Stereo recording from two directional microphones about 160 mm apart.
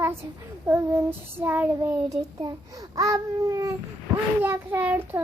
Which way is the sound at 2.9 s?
20° right (ahead or behind).